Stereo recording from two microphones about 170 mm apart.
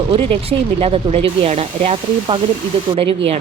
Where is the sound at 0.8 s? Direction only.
35° right (ahead or behind).